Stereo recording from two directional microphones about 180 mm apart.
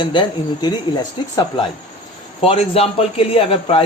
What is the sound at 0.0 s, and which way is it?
A man's voice, 25° left (ahead or behind).